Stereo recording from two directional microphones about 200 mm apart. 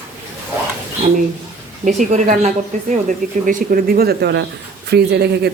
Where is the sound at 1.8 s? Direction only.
40° right (ahead or behind).